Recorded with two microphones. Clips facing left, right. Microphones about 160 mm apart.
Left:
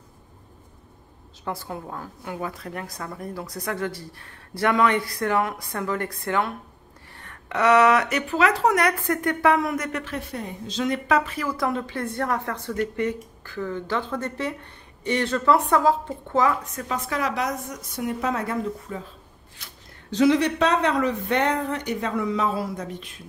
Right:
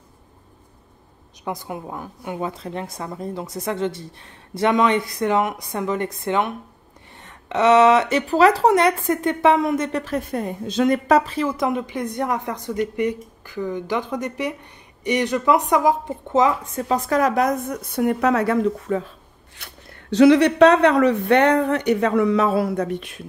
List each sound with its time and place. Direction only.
1.4 s a woman's voice: 15° right (ahead or behind)
10.0 s a woman's voice: 45° right (ahead or behind)
11.1 s a woman's voice: 35° right (ahead or behind); by 23.2 s 65° right (ahead or behind)